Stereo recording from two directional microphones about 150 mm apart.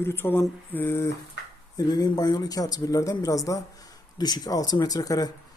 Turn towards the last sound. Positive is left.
turn(degrees=25)  # may be behind; listen again after turning